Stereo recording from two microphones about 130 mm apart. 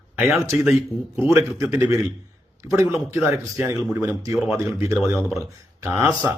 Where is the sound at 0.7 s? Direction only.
15° right (ahead or behind).